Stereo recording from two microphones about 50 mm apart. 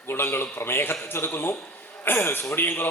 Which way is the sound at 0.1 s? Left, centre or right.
Left.